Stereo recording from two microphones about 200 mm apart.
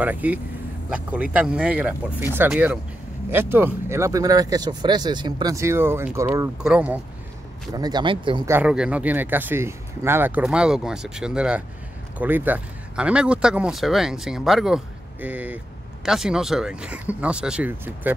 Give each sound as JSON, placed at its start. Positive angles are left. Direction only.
{"t": 0.0, "sound": "speech", "side_deg": -10}
{"t": 7.7, "sound": "speech", "side_deg": -20}
{"t": 8.5, "sound": "speech", "side_deg": -10}